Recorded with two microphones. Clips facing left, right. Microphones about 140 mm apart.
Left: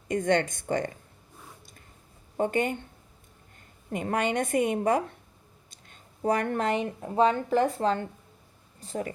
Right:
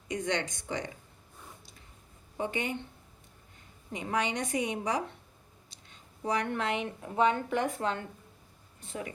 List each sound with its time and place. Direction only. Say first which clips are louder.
0.1 s a woman's voice: left 7 dB; 50° left (ahead or behind)
2.4 s a woman's voice: left 7 dB; 50° left (ahead or behind)
3.9 s a woman's voice: left 5 dB; 50° left (ahead or behind)